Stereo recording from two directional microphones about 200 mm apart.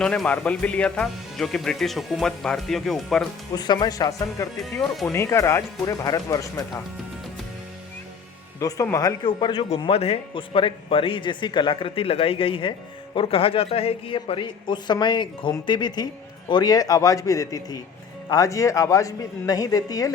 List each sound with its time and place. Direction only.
0.0 s speech: 5° left (ahead or behind)
3.5 s a man's voice: 20° left (ahead or behind)
4.5 s speech: centre (ahead or behind)
5.1 s a woman's voice: 15° left (ahead or behind)
8.5 s a man's voice: 15° left (ahead or behind)